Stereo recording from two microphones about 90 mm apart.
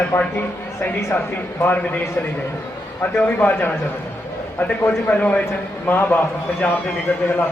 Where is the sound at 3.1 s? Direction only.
20° left (ahead or behind).